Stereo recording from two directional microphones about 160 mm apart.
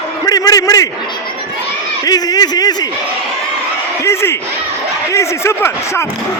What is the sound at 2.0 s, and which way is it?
Speech, 25° left (ahead or behind).